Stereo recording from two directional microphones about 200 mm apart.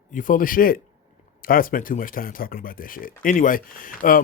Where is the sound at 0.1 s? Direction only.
40° left (ahead or behind).